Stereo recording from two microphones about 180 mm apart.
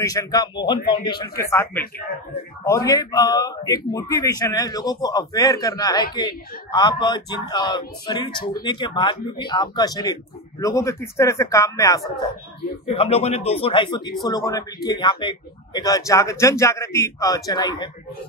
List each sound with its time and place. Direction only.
0.0 s speech: 20° left (ahead or behind)
12.9 s speech: 30° left (ahead or behind)